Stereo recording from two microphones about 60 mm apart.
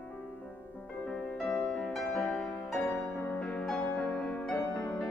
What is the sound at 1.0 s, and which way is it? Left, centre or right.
Music, centre.